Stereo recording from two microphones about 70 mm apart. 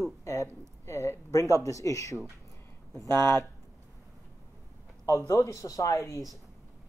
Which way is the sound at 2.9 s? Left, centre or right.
Right.